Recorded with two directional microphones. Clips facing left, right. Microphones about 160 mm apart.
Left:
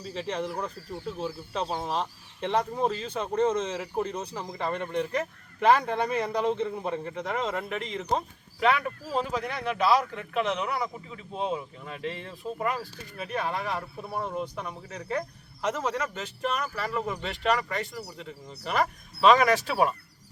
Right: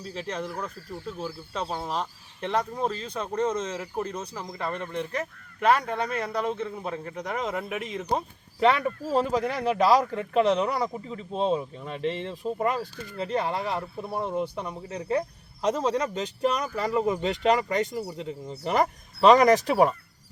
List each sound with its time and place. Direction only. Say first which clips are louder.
0.0 s a man's voice: left 1 dB; 10° left (ahead or behind)
1.5 s a man's voice: even; 10° left (ahead or behind)
7.1 s speech: even; 10° right (ahead or behind)
8.6 s speech: right 3 dB; 30° right (ahead or behind); by 15.2 s 15° right (ahead or behind)
15.6 s speech: right 4 dB; 30° right (ahead or behind)
16.0 s speech: right 5 dB; 15° right (ahead or behind)